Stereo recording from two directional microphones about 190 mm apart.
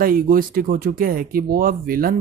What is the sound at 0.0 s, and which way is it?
Speech, 50° right (ahead or behind).